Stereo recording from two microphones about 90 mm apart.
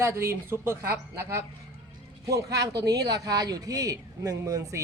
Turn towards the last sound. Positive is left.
turn(degrees=-40)  # may be behind; listen again after turning